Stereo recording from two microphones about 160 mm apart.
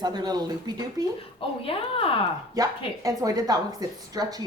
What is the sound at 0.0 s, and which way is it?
A woman's voice, 25° right (ahead or behind).